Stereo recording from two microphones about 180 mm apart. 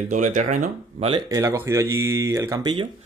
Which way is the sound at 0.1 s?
45° right (ahead or behind).